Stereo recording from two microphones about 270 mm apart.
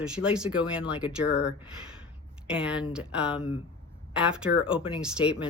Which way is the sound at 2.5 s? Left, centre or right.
Centre.